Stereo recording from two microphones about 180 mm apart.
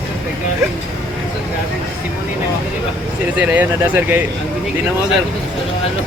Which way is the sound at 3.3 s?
10° right (ahead or behind).